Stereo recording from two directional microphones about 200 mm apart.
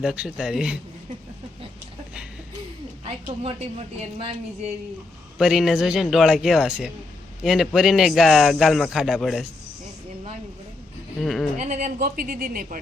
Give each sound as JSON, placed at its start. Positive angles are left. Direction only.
{"t": 0.0, "sound": "speech", "side_deg": -5}
{"t": 3.0, "sound": "a sound", "side_deg": -30}
{"t": 5.4, "sound": "speech", "side_deg": 0}
{"t": 11.2, "sound": "speech", "side_deg": 0}
{"t": 11.5, "sound": "speech", "side_deg": -35}